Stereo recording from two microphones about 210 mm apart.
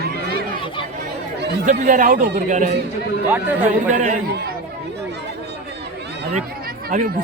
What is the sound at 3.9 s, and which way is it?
Speech, 35° right (ahead or behind).